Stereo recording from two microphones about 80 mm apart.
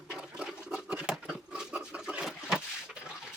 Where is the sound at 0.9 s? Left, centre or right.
Centre.